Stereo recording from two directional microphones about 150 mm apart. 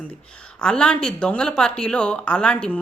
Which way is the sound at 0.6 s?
5° left (ahead or behind).